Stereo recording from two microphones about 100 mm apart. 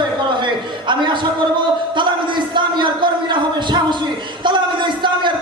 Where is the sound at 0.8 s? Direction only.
55° right (ahead or behind).